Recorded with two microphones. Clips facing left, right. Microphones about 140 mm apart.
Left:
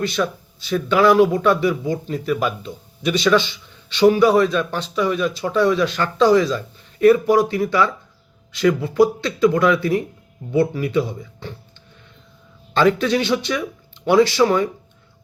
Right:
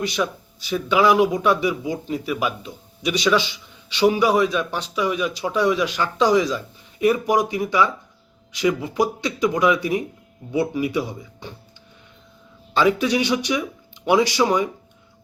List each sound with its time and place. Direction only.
0.0 s speech: 10° right (ahead or behind)
12.7 s speech: 10° right (ahead or behind)